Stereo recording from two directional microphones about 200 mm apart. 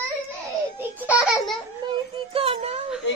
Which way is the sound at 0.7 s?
10° right (ahead or behind).